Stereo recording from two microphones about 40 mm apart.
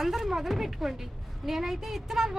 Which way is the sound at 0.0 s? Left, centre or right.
Centre.